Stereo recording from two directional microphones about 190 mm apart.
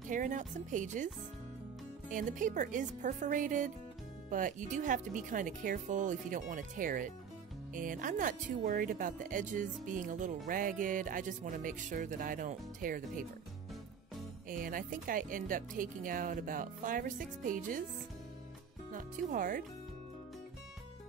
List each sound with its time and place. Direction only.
0.1 s speech: 40° right (ahead or behind)
14.5 s speech: 45° right (ahead or behind)
18.9 s speech: 45° right (ahead or behind)